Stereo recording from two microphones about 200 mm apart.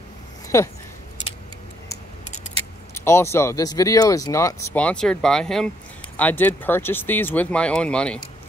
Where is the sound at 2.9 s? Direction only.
15° left (ahead or behind).